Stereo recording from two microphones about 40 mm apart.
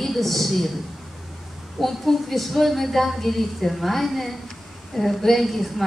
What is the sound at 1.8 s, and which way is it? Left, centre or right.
A woman's voice, centre.